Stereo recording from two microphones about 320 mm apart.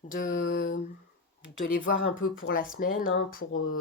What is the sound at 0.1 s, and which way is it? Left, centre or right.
Mantra, left.